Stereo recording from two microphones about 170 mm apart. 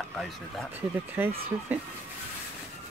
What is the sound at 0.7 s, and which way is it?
Speech, 10° right (ahead or behind).